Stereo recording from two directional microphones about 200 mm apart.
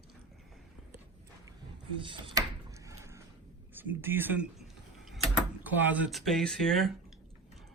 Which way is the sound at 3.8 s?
10° right (ahead or behind).